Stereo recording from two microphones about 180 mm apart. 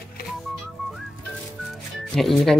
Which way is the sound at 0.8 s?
Centre (ahead or behind).